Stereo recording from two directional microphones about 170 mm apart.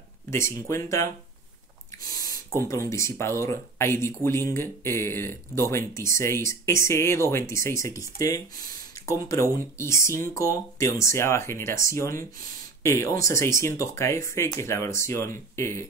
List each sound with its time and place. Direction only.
0.7 s speech: 15° left (ahead or behind)